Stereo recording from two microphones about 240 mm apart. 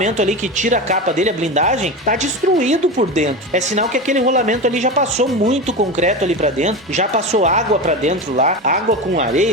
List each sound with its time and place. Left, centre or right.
0.0 s speech: right